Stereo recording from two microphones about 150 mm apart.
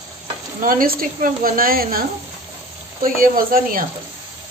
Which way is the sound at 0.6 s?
65° right (ahead or behind).